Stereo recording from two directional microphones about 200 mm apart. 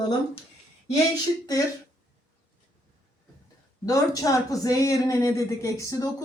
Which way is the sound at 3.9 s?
15° left (ahead or behind).